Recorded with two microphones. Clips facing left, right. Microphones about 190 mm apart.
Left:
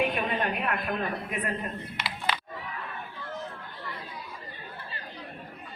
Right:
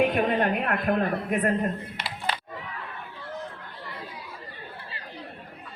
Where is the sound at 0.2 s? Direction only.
45° right (ahead or behind).